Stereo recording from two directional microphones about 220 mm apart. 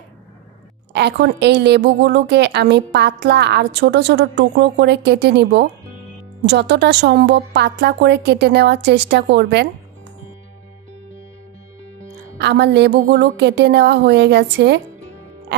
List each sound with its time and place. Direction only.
0.9 s a woman's voice: 50° right (ahead or behind)
12.4 s a woman's voice: 50° right (ahead or behind)